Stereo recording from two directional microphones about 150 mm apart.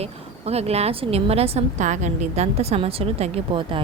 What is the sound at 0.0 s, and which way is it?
A woman's voice, 45° right (ahead or behind).